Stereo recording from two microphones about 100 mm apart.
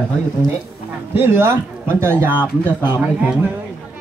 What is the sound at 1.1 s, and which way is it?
A man's voice, 20° right (ahead or behind).